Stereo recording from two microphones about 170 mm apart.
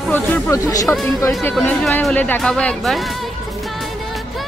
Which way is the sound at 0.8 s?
Centre (ahead or behind).